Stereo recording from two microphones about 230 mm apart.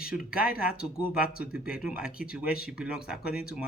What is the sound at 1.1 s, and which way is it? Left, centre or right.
Speech, centre.